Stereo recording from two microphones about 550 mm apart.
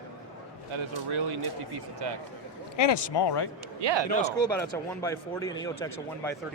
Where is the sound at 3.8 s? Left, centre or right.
Right.